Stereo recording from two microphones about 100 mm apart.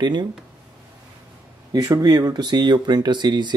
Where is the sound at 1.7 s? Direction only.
40° right (ahead or behind).